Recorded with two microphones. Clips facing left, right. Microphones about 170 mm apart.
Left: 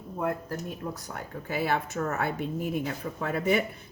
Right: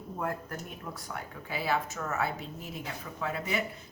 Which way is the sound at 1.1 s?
50° left (ahead or behind).